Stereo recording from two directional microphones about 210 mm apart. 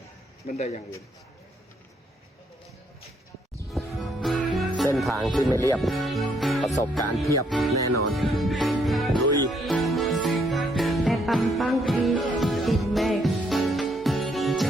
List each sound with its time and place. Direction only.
0.4 s a man's voice: 35° left (ahead or behind)
3.7 s music: centre (ahead or behind)
4.9 s speech: centre (ahead or behind)
8.1 s music: centre (ahead or behind)